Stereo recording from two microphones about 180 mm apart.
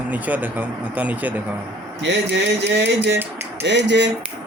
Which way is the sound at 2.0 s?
75° right (ahead or behind).